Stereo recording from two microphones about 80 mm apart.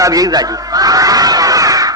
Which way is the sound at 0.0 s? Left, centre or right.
Right.